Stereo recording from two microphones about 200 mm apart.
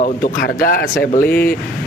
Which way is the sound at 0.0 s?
45° left (ahead or behind).